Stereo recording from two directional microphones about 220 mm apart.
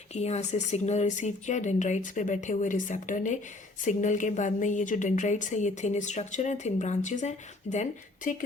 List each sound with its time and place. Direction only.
0.1 s a woman's voice: 30° left (ahead or behind)